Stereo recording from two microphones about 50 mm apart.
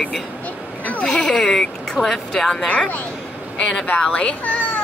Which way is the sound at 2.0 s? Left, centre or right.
Right.